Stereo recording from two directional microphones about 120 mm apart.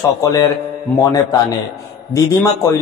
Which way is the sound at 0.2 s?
30° left (ahead or behind).